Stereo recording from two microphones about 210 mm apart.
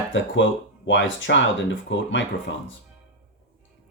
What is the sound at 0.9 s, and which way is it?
Speech, 60° left (ahead or behind).